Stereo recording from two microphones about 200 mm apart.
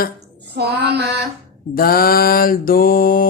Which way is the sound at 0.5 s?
55° right (ahead or behind).